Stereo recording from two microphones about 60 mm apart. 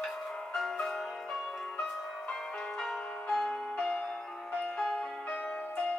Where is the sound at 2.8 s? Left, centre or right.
Centre.